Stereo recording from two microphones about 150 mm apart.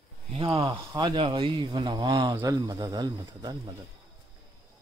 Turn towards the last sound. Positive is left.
turn(degrees=-25)  # may be behind; listen again after turning